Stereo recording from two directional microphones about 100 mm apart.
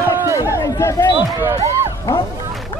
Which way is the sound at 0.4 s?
35° left (ahead or behind).